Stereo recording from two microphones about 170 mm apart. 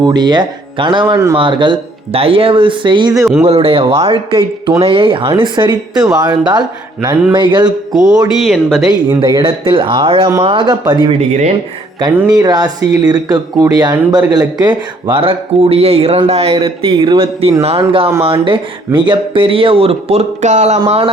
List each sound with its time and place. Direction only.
0.0 s speech: 25° right (ahead or behind)
1.1 s speech: 15° right (ahead or behind)
1.4 s speech: 30° right (ahead or behind)
8.4 s speech: centre (ahead or behind)
9.2 s speech: 25° right (ahead or behind)
11.3 s speech: 40° right (ahead or behind)
12.3 s speech: 25° right (ahead or behind)